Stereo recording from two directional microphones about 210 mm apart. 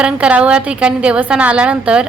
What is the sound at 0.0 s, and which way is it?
A woman's voice, 5° right (ahead or behind).